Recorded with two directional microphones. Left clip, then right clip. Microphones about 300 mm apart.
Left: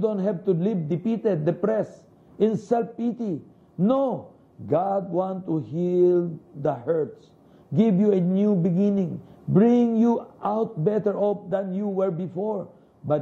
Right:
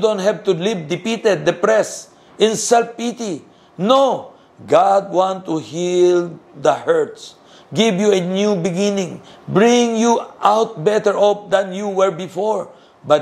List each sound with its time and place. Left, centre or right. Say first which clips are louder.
0.0 s a man's voice: right 9 dB; centre
4.9 s mantra: right 10 dB; right
5.2 s a man's voice: right 9 dB; centre
12.5 s a sound: right 9 dB; centre